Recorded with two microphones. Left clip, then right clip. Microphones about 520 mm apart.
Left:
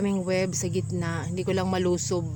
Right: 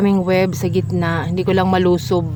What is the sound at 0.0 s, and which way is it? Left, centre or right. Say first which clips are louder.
Speech: right 10 dB; left.